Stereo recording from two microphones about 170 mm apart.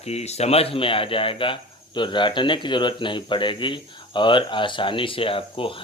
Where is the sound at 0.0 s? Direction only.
40° left (ahead or behind).